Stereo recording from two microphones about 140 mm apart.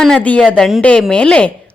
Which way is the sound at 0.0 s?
5° left (ahead or behind).